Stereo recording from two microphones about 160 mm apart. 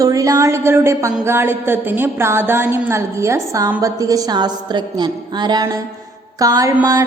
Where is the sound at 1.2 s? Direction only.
15° right (ahead or behind).